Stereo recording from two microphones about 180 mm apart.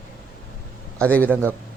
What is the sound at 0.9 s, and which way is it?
Speech, 10° left (ahead or behind).